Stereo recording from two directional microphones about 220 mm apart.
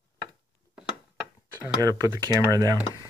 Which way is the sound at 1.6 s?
15° right (ahead or behind).